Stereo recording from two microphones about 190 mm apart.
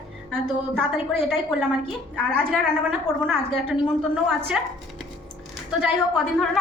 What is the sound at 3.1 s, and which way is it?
Speech, 20° left (ahead or behind).